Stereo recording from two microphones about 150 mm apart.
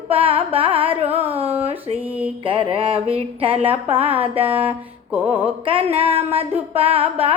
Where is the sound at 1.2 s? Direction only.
40° right (ahead or behind).